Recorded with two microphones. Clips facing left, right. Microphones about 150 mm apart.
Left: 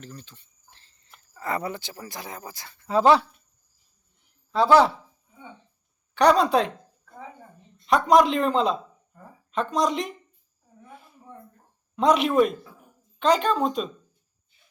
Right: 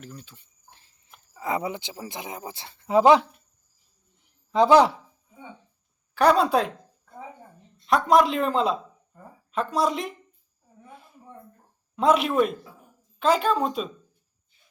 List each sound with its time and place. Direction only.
0.0 s speech: 5° right (ahead or behind)
4.5 s speech: 20° right (ahead or behind)
6.1 s speech: 5° right (ahead or behind)
11.9 s speech: centre (ahead or behind)